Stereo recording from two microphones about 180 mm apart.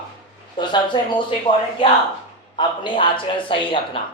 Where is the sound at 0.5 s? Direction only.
25° left (ahead or behind).